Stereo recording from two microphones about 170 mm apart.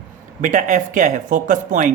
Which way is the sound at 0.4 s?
50° right (ahead or behind).